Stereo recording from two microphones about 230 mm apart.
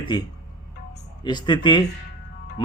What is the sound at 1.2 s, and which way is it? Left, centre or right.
Speech, centre.